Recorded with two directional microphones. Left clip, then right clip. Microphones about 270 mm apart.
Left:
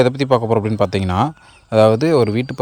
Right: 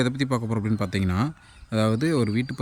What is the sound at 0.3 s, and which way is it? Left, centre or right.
Speech, left.